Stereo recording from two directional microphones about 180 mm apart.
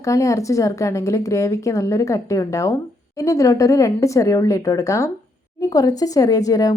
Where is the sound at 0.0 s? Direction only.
15° left (ahead or behind).